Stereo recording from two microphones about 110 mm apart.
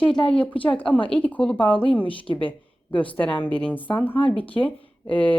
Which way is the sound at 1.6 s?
50° left (ahead or behind).